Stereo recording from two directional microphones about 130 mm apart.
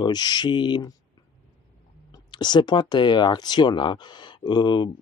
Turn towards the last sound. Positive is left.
turn(degrees=35)  # may be behind; listen again after turning